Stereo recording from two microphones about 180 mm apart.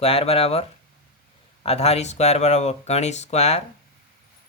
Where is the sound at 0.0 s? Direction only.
35° left (ahead or behind).